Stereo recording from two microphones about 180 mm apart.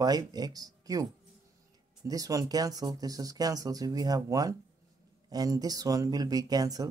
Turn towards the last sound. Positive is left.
turn(degrees=-20)  # may be behind; listen again after turning